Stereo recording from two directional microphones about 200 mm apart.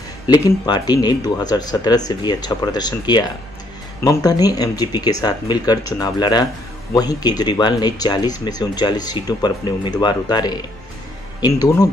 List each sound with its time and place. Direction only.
0.3 s speech: 20° left (ahead or behind)